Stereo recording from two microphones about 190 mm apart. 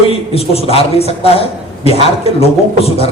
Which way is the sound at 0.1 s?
30° left (ahead or behind).